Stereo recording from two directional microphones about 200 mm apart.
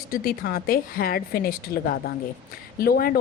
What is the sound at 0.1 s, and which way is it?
A woman's voice, 45° left (ahead or behind).